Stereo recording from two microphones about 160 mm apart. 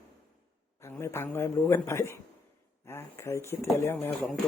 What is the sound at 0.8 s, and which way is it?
Speech, 15° left (ahead or behind).